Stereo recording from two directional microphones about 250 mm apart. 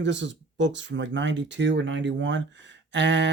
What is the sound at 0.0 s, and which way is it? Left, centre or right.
Speech, right.